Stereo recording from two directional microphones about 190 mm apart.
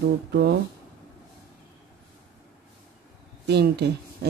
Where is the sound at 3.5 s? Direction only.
60° right (ahead or behind).